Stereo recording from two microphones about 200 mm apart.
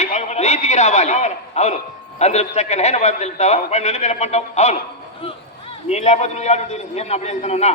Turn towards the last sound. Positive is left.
turn(degrees=35)  # may be behind; listen again after turning